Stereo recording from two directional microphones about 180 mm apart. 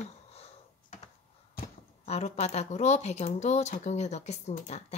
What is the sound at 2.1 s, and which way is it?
Speech, 35° left (ahead or behind).